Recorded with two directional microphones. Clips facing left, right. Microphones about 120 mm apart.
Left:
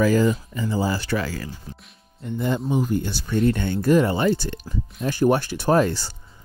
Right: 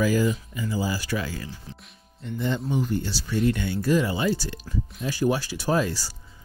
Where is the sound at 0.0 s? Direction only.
60° left (ahead or behind); by 1.5 s 75° left (ahead or behind).